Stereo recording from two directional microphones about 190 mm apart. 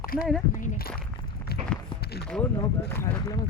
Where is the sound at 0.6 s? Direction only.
50° left (ahead or behind).